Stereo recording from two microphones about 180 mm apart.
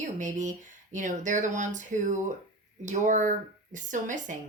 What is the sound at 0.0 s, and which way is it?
A woman's voice, 45° right (ahead or behind).